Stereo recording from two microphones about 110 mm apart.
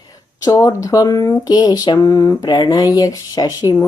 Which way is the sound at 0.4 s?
30° left (ahead or behind).